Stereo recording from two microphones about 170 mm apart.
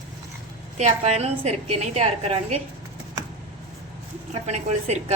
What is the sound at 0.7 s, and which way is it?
A woman's voice, 40° right (ahead or behind).